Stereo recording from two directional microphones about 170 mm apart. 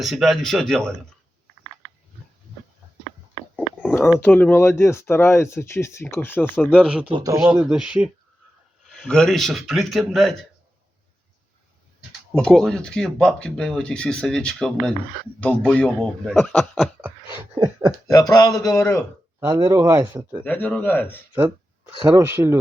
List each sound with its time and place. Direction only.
0.0 s speech: centre (ahead or behind)
3.8 s a sound: 10° left (ahead or behind)
4.2 s speech: 10° left (ahead or behind)
6.7 s speech: 5° right (ahead or behind)
7.1 s speech: 20° right (ahead or behind)
7.4 s speech: 5° right (ahead or behind)
12.3 s speech: 5° left (ahead or behind)
17.6 s a sound: 15° right (ahead or behind)
18.1 s a man's voice: 20° left (ahead or behind)
19.4 s speech: 20° right (ahead or behind)
20.4 s speech: 10° left (ahead or behind)
21.3 s a sound: 10° right (ahead or behind)
22.1 s speech: 15° right (ahead or behind)